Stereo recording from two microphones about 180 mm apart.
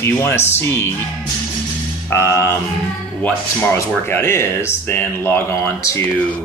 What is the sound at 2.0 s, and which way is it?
Speech, 15° left (ahead or behind).